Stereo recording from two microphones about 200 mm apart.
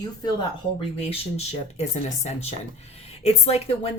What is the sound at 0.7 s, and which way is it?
Speech, 30° left (ahead or behind).